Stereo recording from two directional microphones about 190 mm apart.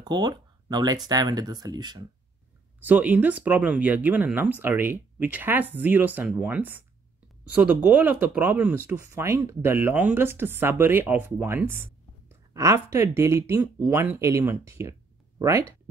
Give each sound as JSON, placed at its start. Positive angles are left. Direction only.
{"t": 0.0, "sound": "speech", "side_deg": -20}
{"t": 2.8, "sound": "speech", "side_deg": -10}